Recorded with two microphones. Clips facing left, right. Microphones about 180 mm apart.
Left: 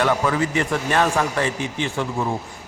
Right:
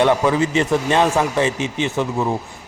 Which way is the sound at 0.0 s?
20° right (ahead or behind).